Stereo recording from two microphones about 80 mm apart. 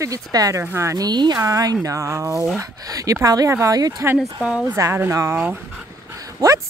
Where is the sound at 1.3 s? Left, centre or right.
Right.